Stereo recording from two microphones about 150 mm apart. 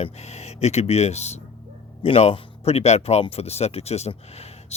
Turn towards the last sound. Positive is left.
turn(degrees=45)  # may be behind; listen again after turning